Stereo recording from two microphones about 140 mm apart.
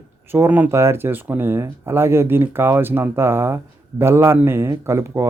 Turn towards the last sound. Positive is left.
turn(degrees=-20)  # may be behind; listen again after turning